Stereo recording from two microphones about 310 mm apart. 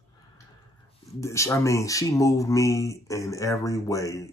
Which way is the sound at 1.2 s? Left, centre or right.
Centre.